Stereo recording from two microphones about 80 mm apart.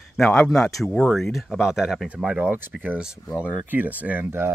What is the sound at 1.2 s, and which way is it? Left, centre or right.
Speech, centre.